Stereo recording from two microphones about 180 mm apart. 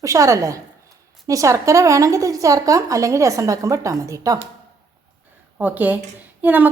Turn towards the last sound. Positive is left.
turn(degrees=-10)  # may be behind; listen again after turning